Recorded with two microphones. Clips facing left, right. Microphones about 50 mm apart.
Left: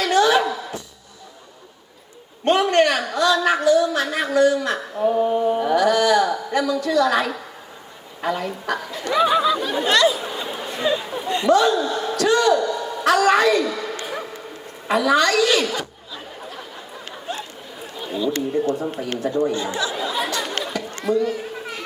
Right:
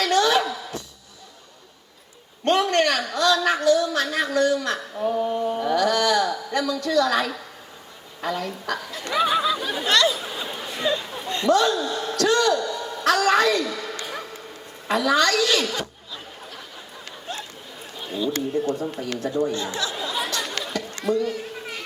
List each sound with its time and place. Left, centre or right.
0.0 s music: centre
2.4 s a woman's voice: centre
9.1 s chatter: centre
14.0 s bow-wow: centre
14.8 s chuckle: centre
18.5 s a woman's voice: centre
19.8 s chatter: centre
21.0 s a woman's voice: centre